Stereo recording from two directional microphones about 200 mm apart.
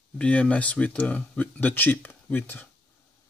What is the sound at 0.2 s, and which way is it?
Speech, 5° left (ahead or behind).